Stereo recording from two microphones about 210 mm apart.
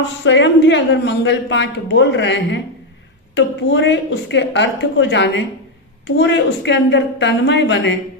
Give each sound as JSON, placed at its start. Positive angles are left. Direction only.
{"t": 0.3, "sound": "a woman's voice", "side_deg": 60}